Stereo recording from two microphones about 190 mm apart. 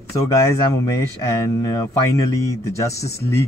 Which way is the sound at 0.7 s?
15° left (ahead or behind).